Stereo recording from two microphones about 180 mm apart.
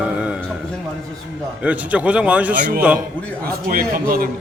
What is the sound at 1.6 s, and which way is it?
Speech, 10° right (ahead or behind).